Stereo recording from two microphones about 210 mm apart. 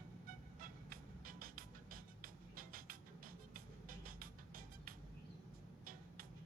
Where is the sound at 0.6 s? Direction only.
40° right (ahead or behind).